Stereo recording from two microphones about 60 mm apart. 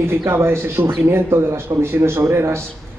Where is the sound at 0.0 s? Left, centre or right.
Right.